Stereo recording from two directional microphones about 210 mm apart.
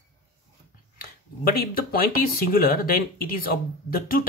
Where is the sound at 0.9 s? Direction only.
45° left (ahead or behind).